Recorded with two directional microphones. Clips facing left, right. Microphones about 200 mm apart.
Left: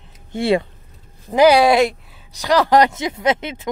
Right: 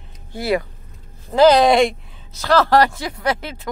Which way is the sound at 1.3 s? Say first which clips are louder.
Even; 10° left (ahead or behind).